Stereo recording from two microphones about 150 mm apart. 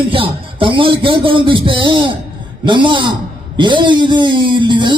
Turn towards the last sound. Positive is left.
turn(degrees=-30)  # may be behind; listen again after turning